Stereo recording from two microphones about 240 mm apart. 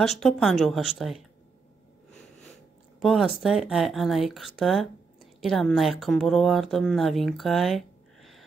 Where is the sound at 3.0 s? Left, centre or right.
Centre.